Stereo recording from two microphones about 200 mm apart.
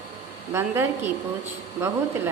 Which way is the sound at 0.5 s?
10° right (ahead or behind).